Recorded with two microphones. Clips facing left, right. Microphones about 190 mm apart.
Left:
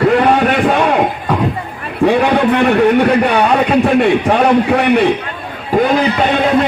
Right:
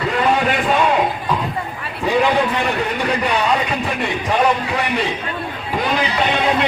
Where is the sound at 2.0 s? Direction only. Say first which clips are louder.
Left 5 dB; 60° left (ahead or behind).